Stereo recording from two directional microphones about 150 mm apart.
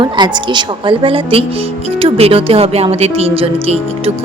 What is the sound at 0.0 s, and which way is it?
Speech, 30° right (ahead or behind).